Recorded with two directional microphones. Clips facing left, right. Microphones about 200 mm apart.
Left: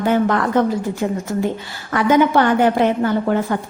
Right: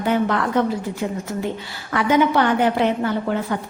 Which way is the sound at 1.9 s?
45° left (ahead or behind).